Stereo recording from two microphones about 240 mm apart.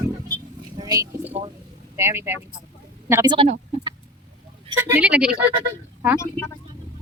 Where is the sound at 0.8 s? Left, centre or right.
Centre.